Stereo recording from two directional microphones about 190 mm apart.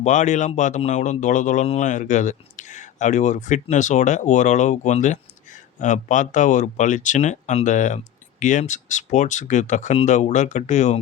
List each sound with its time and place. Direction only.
0.0 s speech: 40° left (ahead or behind)